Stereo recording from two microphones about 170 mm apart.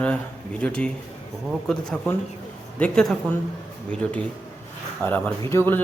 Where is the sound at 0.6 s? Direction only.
5° left (ahead or behind).